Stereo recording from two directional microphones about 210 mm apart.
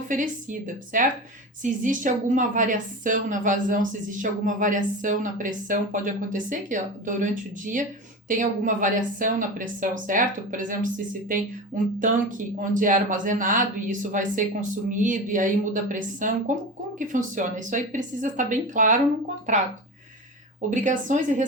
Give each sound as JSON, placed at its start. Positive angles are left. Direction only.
{"t": 0.1, "sound": "a woman's voice", "side_deg": -40}
{"t": 20.7, "sound": "a woman's voice", "side_deg": -35}